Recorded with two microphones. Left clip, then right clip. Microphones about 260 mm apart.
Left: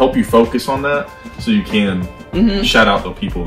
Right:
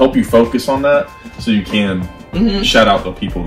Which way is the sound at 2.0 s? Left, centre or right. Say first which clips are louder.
Left 1 dB; centre.